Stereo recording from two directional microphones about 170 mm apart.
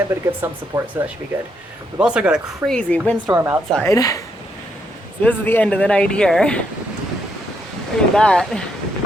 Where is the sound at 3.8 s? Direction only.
20° left (ahead or behind).